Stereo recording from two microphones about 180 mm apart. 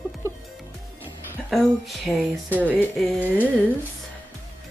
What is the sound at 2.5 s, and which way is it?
Music, 10° right (ahead or behind).